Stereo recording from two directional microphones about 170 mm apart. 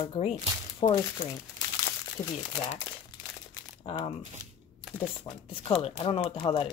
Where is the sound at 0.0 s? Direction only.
35° left (ahead or behind).